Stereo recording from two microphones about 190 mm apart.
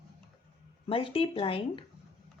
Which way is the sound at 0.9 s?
30° left (ahead or behind).